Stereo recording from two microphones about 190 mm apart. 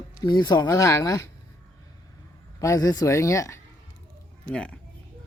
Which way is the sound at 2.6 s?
20° left (ahead or behind).